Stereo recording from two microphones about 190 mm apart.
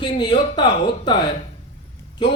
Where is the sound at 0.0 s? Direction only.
25° left (ahead or behind).